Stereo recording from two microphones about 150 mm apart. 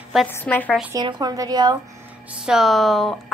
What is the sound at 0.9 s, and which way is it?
Speech, 30° right (ahead or behind).